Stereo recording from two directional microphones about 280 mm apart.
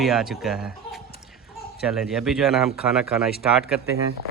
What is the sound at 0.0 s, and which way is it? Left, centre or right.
Speech, centre.